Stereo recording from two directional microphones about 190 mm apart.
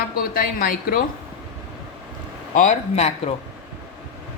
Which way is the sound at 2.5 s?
40° left (ahead or behind).